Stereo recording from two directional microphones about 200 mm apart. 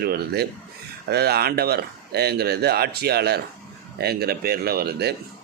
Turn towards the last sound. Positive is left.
turn(degrees=-50)  # may be behind; listen again after turning